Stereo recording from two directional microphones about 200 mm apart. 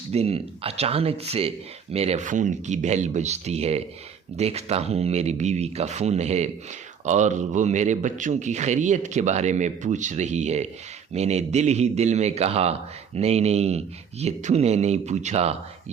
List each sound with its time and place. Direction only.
0.1 s speech: 30° right (ahead or behind)